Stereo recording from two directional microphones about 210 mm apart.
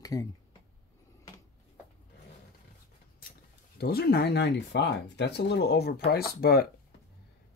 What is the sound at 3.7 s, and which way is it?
Speech, 50° left (ahead or behind).